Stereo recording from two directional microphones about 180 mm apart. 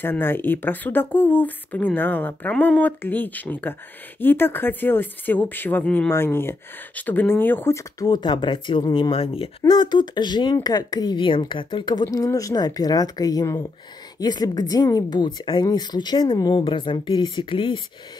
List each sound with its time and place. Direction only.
0.0 s speech: 10° left (ahead or behind); by 17.7 s 25° left (ahead or behind)